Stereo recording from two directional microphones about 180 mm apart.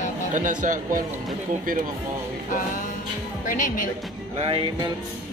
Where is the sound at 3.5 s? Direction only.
45° left (ahead or behind).